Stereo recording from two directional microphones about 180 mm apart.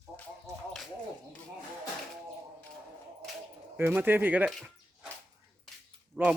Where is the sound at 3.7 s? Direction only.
10° right (ahead or behind).